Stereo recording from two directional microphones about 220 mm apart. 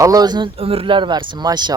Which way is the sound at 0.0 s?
15° right (ahead or behind).